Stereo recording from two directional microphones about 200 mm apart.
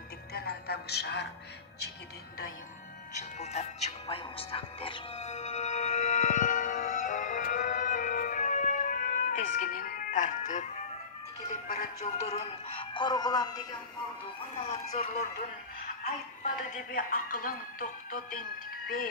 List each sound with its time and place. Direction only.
0.3 s music: 50° left (ahead or behind)
3.2 s music: 35° left (ahead or behind)
11.6 s speech: 35° left (ahead or behind)
14.9 s speech: 35° left (ahead or behind)